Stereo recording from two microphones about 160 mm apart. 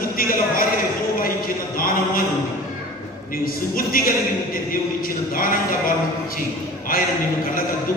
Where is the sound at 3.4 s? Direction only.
60° left (ahead or behind).